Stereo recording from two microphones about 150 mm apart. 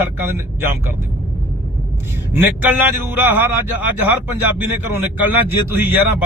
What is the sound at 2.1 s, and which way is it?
Speech, 15° right (ahead or behind).